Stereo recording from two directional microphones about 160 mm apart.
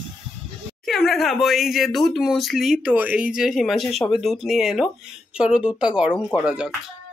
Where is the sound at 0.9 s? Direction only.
Centre (ahead or behind).